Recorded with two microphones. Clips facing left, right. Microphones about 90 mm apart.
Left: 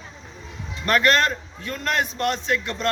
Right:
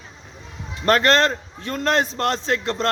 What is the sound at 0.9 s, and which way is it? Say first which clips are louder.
A man's voice: right 2 dB; 30° right (ahead or behind).